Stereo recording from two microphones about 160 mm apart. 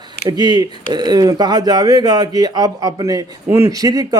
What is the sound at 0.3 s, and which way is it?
A man's voice, 25° right (ahead or behind).